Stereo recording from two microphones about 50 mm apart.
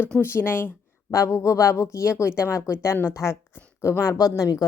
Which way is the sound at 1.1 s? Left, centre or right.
Left.